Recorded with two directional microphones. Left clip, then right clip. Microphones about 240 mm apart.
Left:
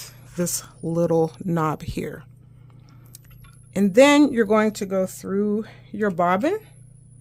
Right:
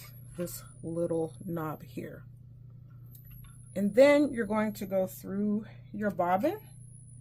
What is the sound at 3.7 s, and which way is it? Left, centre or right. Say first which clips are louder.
Speech: left 7 dB; left.